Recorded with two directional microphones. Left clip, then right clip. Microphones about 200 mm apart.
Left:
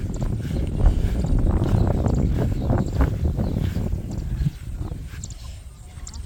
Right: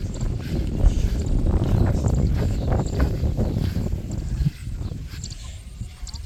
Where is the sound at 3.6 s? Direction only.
Centre (ahead or behind).